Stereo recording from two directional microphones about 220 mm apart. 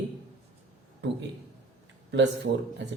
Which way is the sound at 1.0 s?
50° right (ahead or behind).